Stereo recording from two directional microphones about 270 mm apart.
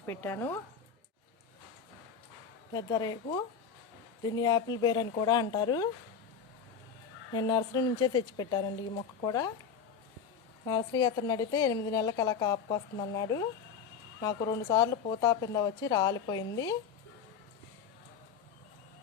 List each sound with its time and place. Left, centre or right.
0.0 s speech: centre
2.7 s speech: centre
7.3 s speech: centre
10.7 s speech: centre
14.7 s speech: centre